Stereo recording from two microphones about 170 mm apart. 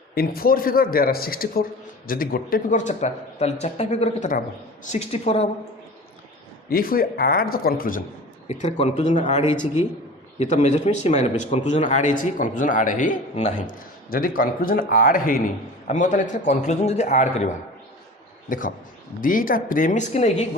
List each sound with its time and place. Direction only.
0.1 s a man's voice: 60° left (ahead or behind); by 5.5 s 35° left (ahead or behind)
6.7 s a man's voice: 60° left (ahead or behind)
8.4 s a man's voice: 40° left (ahead or behind)